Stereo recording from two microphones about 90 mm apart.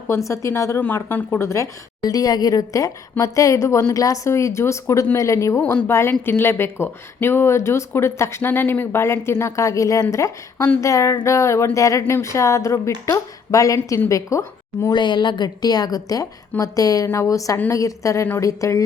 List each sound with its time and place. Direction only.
0.1 s a woman's voice: 35° left (ahead or behind)
0.8 s speech: 20° left (ahead or behind)
2.0 s a woman's voice: 45° left (ahead or behind)
14.9 s a woman's voice: 55° left (ahead or behind); by 18.9 s 35° left (ahead or behind)